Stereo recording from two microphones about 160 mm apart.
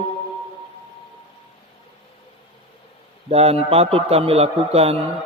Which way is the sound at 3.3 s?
40° right (ahead or behind).